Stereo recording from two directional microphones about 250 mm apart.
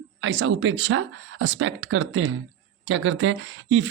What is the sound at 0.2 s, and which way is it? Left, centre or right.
Speech, right.